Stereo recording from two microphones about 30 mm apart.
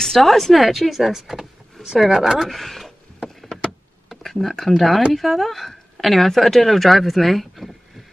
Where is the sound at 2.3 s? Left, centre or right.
Centre.